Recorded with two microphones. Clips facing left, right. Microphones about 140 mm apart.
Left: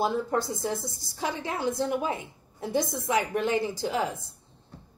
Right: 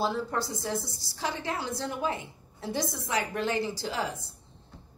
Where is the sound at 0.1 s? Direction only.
20° left (ahead or behind).